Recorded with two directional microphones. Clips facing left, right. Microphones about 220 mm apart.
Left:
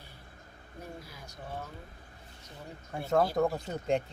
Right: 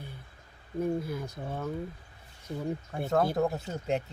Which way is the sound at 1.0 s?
55° right (ahead or behind).